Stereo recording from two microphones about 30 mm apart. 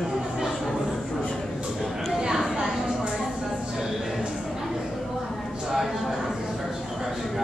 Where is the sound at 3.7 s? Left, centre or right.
Centre.